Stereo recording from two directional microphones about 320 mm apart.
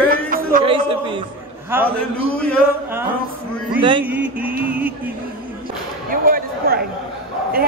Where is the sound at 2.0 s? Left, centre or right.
Centre.